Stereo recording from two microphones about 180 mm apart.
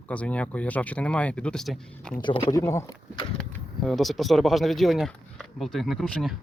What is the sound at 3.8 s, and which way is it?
Speech, centre (ahead or behind).